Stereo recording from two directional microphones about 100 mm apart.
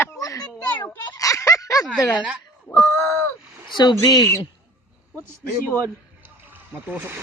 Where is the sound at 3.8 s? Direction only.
45° left (ahead or behind).